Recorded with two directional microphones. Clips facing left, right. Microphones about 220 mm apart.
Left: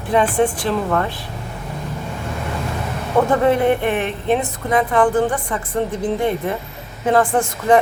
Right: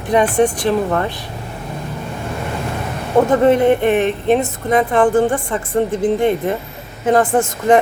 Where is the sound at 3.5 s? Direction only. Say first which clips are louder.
Right 4 dB; 20° right (ahead or behind).